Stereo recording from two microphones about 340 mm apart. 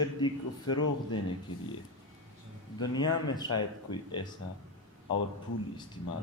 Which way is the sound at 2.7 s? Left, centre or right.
Centre.